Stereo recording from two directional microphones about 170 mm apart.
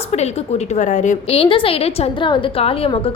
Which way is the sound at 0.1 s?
40° left (ahead or behind).